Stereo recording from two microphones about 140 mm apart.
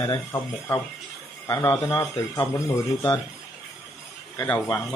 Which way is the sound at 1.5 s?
20° left (ahead or behind).